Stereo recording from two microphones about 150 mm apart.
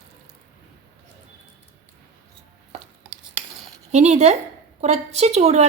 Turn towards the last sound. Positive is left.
turn(degrees=-45)  # may be behind; listen again after turning